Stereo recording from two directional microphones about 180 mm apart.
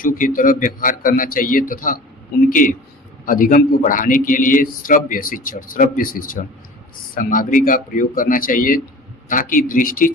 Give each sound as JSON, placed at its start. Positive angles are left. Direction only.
{"t": 0.0, "sound": "a man's voice", "side_deg": 50}